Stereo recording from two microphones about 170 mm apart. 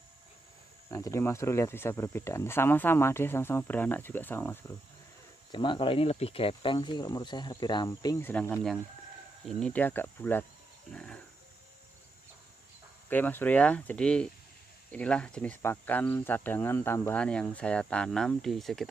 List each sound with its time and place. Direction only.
0.8 s speech: 20° left (ahead or behind)
5.5 s speech: 30° left (ahead or behind)
8.3 s speech: 10° left (ahead or behind)
10.9 s a sound: 5° left (ahead or behind)
13.1 s speech: 10° left (ahead or behind)